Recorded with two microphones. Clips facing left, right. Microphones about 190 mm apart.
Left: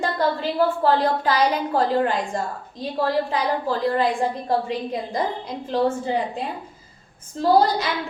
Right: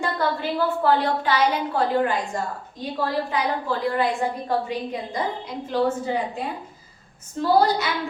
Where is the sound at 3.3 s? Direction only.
35° left (ahead or behind).